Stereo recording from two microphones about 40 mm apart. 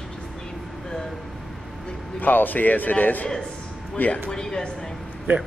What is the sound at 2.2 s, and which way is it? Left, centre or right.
A man's voice, left.